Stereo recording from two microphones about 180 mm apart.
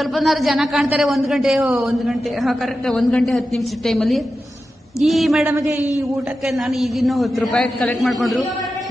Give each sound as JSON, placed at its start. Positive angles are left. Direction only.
{"t": 0.1, "sound": "a man's voice", "side_deg": 0}
{"t": 5.5, "sound": "a man's voice", "side_deg": -15}
{"t": 6.4, "sound": "a man's voice", "side_deg": 0}